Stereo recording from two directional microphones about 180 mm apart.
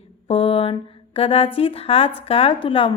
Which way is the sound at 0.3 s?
30° left (ahead or behind).